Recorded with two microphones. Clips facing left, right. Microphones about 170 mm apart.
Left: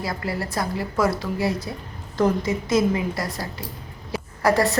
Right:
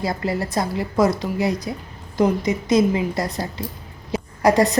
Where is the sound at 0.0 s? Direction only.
25° right (ahead or behind).